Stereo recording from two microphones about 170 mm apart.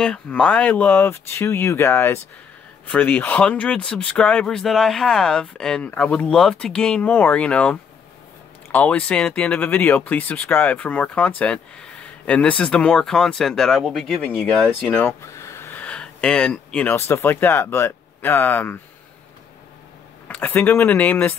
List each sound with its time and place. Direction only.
0.0 s speech: 5° left (ahead or behind)
20.2 s speech: 10° left (ahead or behind)